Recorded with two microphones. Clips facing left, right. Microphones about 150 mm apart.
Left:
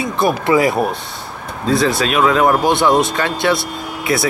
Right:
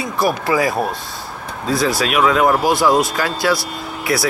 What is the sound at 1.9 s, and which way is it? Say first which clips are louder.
Speech: left 1 dB; 25° left (ahead or behind).